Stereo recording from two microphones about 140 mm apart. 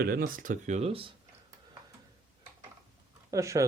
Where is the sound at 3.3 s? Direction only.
20° right (ahead or behind).